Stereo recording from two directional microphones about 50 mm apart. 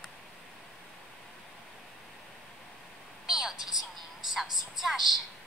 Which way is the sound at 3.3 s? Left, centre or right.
Centre.